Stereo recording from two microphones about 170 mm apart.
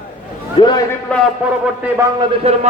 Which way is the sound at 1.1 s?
5° left (ahead or behind).